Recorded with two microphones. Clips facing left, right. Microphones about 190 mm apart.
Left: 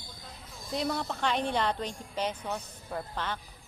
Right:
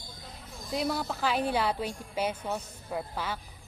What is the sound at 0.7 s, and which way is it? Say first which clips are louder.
Speech: right 1 dB; 5° right (ahead or behind).